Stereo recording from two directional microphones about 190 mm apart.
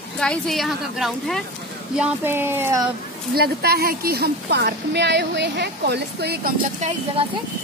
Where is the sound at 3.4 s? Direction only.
55° right (ahead or behind).